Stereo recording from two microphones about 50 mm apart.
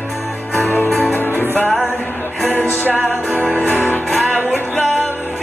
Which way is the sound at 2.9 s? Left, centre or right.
Right.